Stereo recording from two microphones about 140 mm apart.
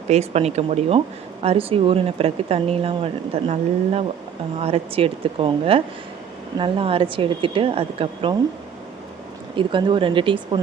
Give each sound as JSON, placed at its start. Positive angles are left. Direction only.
{"t": 0.1, "sound": "speech", "side_deg": -50}
{"t": 9.6, "sound": "speech", "side_deg": -35}